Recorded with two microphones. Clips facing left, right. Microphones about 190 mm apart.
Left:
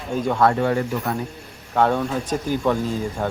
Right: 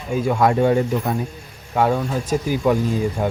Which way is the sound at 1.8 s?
10° right (ahead or behind).